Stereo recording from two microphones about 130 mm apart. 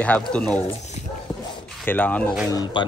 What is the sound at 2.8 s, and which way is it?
Speech, 35° left (ahead or behind).